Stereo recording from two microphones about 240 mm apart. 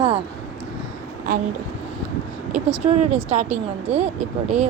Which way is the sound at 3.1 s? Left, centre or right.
Right.